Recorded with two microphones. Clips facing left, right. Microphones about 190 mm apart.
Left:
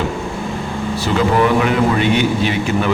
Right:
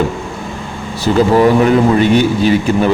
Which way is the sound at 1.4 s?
40° right (ahead or behind).